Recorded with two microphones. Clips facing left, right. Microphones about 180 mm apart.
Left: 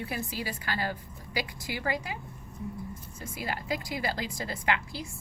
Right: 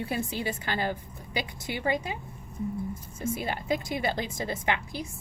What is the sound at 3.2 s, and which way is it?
A woman's voice, 25° right (ahead or behind).